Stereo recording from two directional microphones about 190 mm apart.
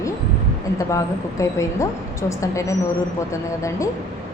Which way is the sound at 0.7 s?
15° left (ahead or behind).